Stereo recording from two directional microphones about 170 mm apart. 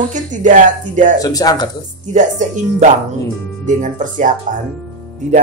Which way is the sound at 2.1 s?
45° right (ahead or behind).